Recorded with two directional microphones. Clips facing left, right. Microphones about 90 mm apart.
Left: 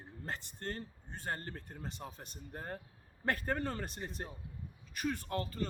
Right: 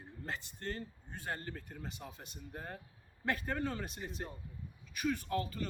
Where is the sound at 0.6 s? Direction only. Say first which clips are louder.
Even; 45° left (ahead or behind).